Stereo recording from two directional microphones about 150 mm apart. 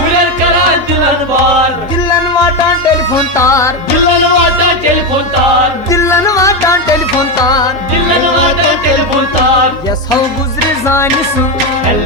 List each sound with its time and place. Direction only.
3.3 s music: 20° left (ahead or behind)
5.9 s music: 20° left (ahead or behind)
10.8 s music: 15° left (ahead or behind)